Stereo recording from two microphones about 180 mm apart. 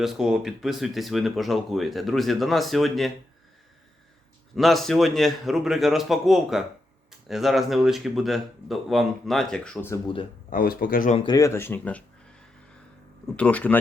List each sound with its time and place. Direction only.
0.0 s speech: 5° right (ahead or behind)
4.5 s speech: centre (ahead or behind)
10.5 s speech: 55° left (ahead or behind)
11.2 s speech: 20° left (ahead or behind)